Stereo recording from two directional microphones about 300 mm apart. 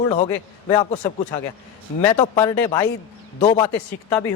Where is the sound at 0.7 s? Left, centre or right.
Centre.